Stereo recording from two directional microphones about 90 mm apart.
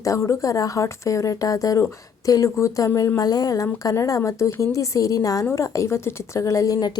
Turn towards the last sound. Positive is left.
turn(degrees=45)  # may be behind; listen again after turning